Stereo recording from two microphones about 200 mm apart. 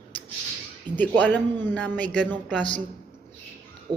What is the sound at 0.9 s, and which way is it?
Speech, 20° right (ahead or behind).